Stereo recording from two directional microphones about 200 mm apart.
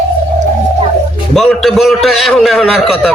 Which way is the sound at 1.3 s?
Centre (ahead or behind).